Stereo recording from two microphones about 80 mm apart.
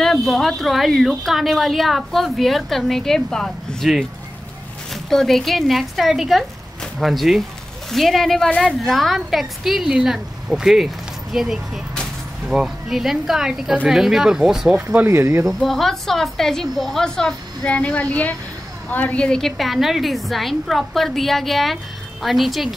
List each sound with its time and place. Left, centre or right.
0.0 s speech: centre
15.0 s speech: right
15.4 s speech: centre